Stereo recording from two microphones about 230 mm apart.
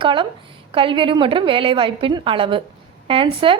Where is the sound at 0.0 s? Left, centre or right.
Right.